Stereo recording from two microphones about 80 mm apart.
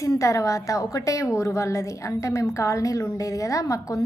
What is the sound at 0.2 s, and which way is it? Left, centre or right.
A woman's voice, left.